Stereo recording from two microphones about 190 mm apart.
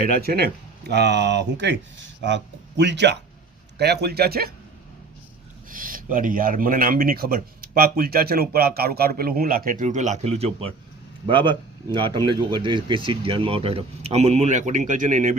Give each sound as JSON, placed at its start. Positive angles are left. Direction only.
{"t": 0.1, "sound": "speech", "side_deg": -55}
{"t": 5.7, "sound": "a man's voice", "side_deg": -45}